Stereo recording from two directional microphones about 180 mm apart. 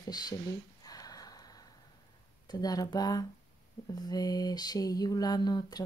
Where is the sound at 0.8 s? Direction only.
20° left (ahead or behind).